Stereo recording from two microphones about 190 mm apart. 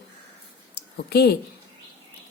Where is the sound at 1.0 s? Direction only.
60° left (ahead or behind).